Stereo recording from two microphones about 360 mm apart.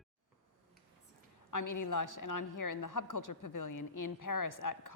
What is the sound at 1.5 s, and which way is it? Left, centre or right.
A woman's voice, left.